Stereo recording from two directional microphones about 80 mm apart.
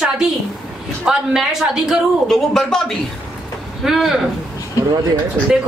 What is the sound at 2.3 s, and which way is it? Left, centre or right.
Speech, centre.